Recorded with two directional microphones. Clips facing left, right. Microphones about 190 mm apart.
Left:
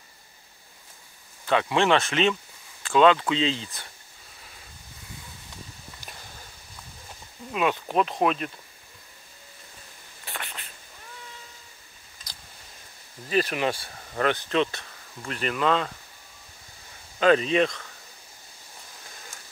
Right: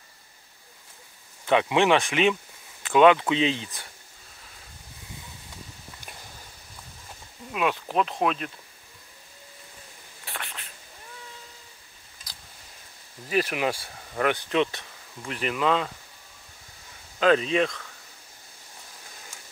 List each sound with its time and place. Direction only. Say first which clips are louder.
1.4 s speech: right 2 dB; 15° right (ahead or behind)
7.5 s speech: left 1 dB; centre (ahead or behind)
10.2 s a sound: left 1 dB; centre (ahead or behind)
13.3 s speech: left 1 dB; 10° right (ahead or behind)
17.2 s speech: left 1 dB; centre (ahead or behind)